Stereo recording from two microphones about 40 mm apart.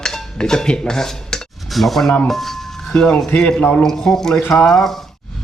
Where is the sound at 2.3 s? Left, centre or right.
Centre.